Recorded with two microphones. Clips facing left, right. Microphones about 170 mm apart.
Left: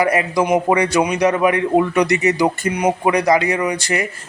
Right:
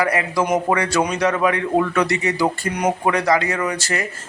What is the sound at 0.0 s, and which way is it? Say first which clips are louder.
A man's voice: left 3 dB; 20° left (ahead or behind).